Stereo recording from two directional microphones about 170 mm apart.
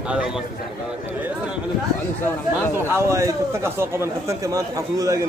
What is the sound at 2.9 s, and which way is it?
A man's voice, 15° right (ahead or behind).